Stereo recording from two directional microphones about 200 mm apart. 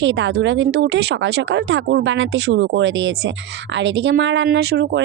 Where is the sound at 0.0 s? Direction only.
65° right (ahead or behind).